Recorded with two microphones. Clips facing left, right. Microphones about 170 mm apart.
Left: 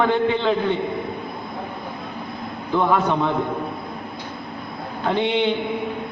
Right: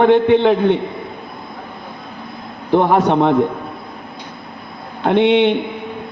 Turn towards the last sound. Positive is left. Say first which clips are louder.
# right 8 dB
turn(degrees=-70)  # may be behind; listen again after turning